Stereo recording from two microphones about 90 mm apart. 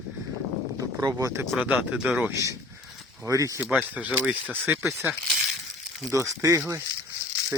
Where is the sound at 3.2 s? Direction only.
40° right (ahead or behind).